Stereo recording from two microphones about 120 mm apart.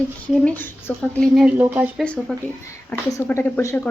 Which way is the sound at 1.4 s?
15° right (ahead or behind).